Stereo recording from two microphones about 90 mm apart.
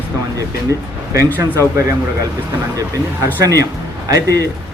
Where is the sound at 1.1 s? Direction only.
30° right (ahead or behind).